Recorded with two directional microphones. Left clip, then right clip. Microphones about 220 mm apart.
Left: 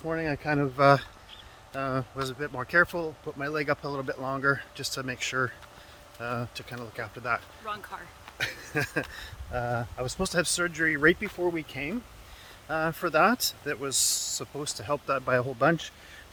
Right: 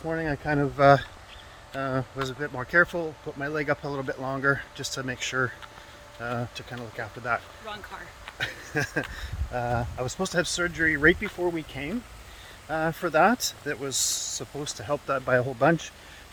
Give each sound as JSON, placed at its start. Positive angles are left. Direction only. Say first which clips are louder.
{"t": 0.0, "sound": "speech", "louder": "right 1 dB", "side_deg": 5}
{"t": 7.6, "sound": "speech", "louder": "left 1 dB", "side_deg": 20}
{"t": 8.4, "sound": "speech", "louder": "right 1 dB", "side_deg": 5}